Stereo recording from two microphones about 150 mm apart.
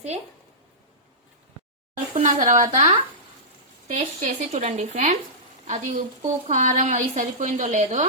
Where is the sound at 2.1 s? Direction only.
55° right (ahead or behind).